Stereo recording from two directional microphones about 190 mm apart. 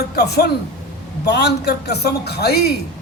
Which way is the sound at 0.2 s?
60° left (ahead or behind).